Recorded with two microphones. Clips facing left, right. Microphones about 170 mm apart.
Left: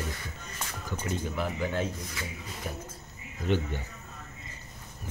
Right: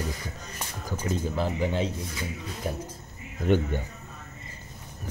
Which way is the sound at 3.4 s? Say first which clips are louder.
Right 5 dB; 50° right (ahead or behind).